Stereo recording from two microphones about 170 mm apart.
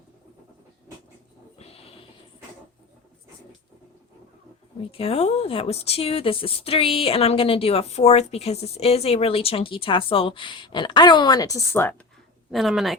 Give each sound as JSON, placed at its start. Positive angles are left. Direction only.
{"t": 1.5, "sound": "a sound", "side_deg": 35}
{"t": 4.8, "sound": "speech", "side_deg": 35}
{"t": 12.5, "sound": "speech", "side_deg": 0}